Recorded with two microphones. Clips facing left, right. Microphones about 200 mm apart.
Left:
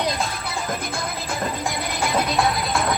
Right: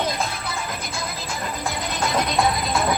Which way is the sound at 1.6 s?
10° left (ahead or behind).